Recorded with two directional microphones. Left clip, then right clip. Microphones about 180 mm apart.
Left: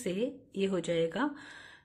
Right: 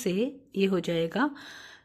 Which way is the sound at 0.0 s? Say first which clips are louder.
Right 5 dB; 30° right (ahead or behind).